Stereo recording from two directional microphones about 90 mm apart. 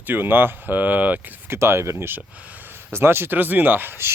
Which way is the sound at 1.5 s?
30° right (ahead or behind).